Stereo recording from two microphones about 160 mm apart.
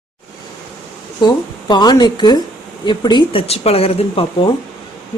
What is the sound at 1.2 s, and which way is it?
Speech, 25° left (ahead or behind).